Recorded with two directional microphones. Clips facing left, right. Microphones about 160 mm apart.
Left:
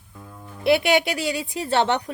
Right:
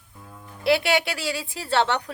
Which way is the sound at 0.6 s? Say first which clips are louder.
Left 3 dB; 20° left (ahead or behind).